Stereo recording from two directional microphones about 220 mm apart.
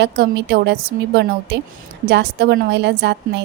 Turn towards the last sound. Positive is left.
turn(degrees=-50)  # may be behind; listen again after turning